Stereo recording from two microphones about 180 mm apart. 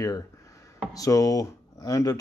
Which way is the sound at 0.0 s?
20° left (ahead or behind).